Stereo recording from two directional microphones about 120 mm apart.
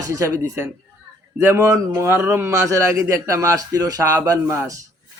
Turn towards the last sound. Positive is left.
turn(degrees=-25)  # may be behind; listen again after turning